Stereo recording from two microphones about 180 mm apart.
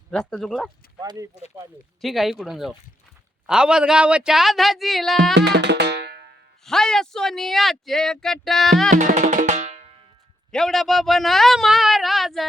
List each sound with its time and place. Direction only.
0.1 s speech: 5° left (ahead or behind)
1.0 s speech: 20° right (ahead or behind)
2.0 s speech: centre (ahead or behind)
5.3 s music: 70° right (ahead or behind)
6.7 s speech: 5° left (ahead or behind)
8.9 s percussion: 45° right (ahead or behind)
10.5 s speech: centre (ahead or behind)